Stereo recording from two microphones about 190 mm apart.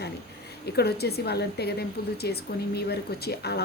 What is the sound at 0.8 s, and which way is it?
Speech, 55° left (ahead or behind).